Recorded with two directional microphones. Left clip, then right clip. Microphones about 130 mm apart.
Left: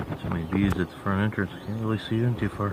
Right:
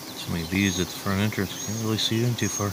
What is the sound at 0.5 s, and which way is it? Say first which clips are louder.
Speech: right 2 dB; 30° right (ahead or behind).